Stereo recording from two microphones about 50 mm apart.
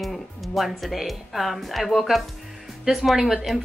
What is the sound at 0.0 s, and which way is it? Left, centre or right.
A woman's voice, centre.